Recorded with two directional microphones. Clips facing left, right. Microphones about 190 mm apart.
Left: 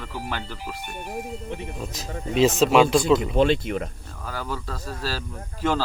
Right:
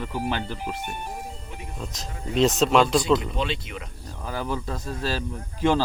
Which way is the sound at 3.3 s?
50° left (ahead or behind).